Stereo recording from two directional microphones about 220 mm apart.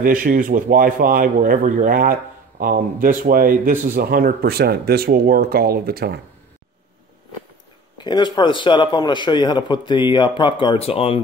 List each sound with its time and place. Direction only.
0.0 s a man's voice: 40° right (ahead or behind)
8.0 s a man's voice: 20° left (ahead or behind)